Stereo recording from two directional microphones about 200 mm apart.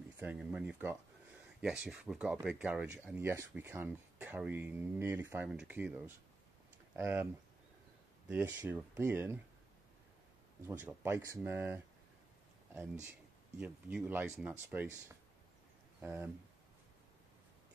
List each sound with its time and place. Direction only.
0.2 s speech: 5° right (ahead or behind)
8.3 s speech: 10° right (ahead or behind)
10.7 s speech: 5° right (ahead or behind)
13.6 s speech: 5° right (ahead or behind)
16.0 s speech: 10° right (ahead or behind)